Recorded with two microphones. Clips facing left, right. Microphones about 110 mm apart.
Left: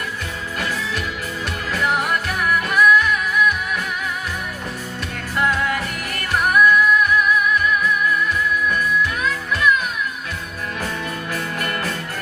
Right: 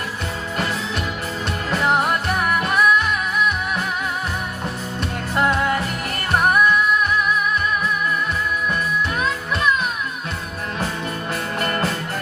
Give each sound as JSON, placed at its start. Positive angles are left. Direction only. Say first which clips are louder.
{"t": 1.7, "sound": "music", "louder": "right 2 dB", "side_deg": -25}
{"t": 5.4, "sound": "music", "louder": "right 1 dB", "side_deg": -30}
{"t": 9.0, "sound": "music", "louder": "left 1 dB", "side_deg": -25}
{"t": 11.6, "sound": "music", "louder": "right 6 dB", "side_deg": -30}